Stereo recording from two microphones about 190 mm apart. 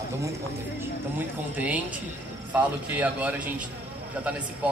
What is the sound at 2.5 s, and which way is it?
A man's voice, 10° right (ahead or behind).